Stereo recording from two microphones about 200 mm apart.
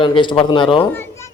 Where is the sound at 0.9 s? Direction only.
10° left (ahead or behind).